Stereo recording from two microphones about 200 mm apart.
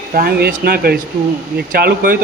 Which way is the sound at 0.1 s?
50° right (ahead or behind).